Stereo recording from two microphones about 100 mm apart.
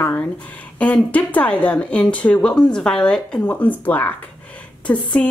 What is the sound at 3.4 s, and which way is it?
A woman's voice, 20° left (ahead or behind).